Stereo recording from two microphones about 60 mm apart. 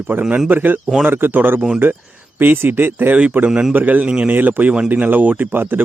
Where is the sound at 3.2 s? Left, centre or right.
Right.